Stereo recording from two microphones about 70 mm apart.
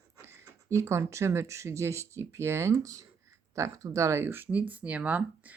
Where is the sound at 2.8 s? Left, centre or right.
Right.